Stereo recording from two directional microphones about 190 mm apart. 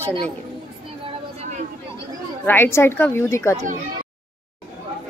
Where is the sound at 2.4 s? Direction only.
10° left (ahead or behind).